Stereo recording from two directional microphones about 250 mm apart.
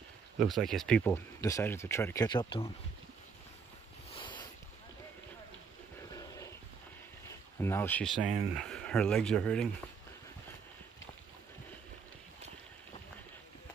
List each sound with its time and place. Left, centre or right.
0.4 s speech: centre
4.1 s a sound: centre
6.1 s dog: centre
7.5 s speech: centre